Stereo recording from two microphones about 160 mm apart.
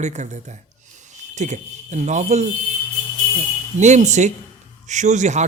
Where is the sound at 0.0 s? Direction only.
45° right (ahead or behind).